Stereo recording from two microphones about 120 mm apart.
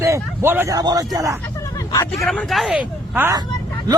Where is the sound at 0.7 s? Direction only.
30° right (ahead or behind).